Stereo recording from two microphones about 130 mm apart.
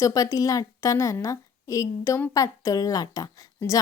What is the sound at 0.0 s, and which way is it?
Speech, 25° left (ahead or behind).